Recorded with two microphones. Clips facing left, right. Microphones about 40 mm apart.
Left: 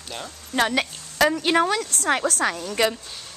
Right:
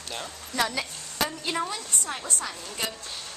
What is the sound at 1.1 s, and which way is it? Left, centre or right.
A woman's voice, left.